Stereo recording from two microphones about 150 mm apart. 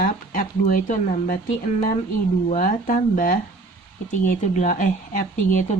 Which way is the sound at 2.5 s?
60° left (ahead or behind).